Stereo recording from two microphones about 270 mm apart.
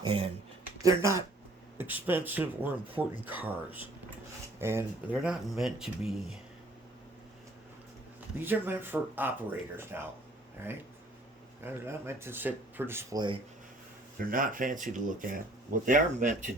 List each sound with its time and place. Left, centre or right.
0.0 s a sound: centre
0.8 s speech: centre
8.4 s speech: centre
14.3 s speech: right